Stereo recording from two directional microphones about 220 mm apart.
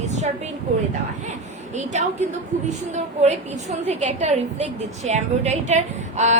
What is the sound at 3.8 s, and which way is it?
A woman's voice, 30° right (ahead or behind).